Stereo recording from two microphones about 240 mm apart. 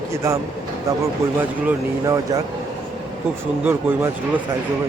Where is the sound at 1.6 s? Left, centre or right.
Centre.